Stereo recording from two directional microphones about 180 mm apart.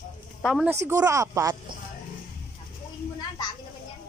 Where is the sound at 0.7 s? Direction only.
15° right (ahead or behind).